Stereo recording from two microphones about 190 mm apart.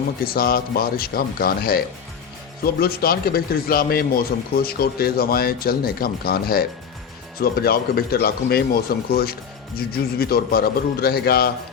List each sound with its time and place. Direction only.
0.3 s speech: 50° left (ahead or behind)
2.8 s speech: 55° left (ahead or behind)